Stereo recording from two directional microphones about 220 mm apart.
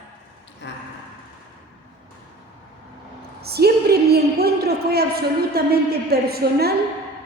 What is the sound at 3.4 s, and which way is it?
A woman's voice, 45° right (ahead or behind).